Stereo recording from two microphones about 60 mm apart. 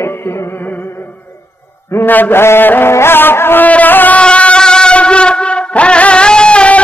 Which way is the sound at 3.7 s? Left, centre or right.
Left.